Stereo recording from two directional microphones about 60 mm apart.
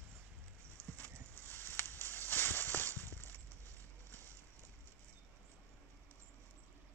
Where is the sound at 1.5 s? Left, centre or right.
Left.